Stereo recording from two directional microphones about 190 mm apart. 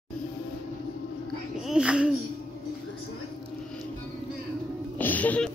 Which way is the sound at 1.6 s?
5° right (ahead or behind).